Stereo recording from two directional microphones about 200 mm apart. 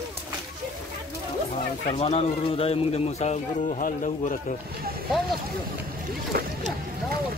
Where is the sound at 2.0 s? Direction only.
30° left (ahead or behind).